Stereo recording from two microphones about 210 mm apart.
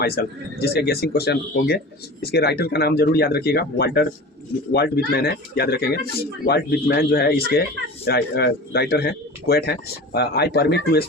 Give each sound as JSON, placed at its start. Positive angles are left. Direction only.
{"t": 0.0, "sound": "speech", "side_deg": 50}